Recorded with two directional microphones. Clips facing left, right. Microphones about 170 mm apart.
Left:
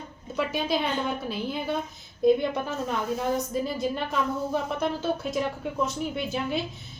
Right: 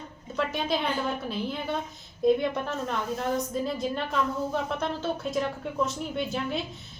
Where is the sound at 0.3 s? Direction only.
5° left (ahead or behind).